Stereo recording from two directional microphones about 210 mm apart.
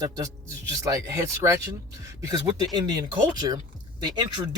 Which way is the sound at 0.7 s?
15° right (ahead or behind).